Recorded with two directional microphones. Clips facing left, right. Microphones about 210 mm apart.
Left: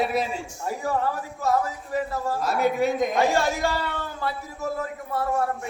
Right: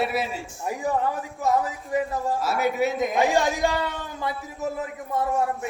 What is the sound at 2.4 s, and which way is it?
Speech, 5° right (ahead or behind).